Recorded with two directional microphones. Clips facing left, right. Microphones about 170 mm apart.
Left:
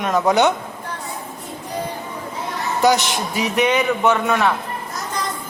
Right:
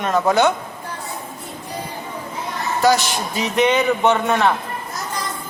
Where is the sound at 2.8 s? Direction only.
20° left (ahead or behind).